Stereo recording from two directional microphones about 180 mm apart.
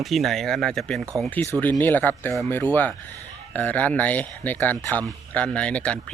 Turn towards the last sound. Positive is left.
turn(degrees=5)  # may be behind; listen again after turning